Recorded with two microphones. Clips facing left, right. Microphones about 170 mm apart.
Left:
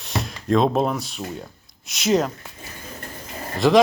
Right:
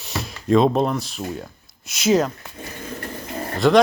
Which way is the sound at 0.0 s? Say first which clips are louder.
Left 1 dB; centre (ahead or behind).